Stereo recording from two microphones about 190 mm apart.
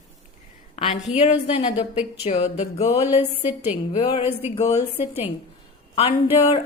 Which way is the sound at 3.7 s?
30° left (ahead or behind).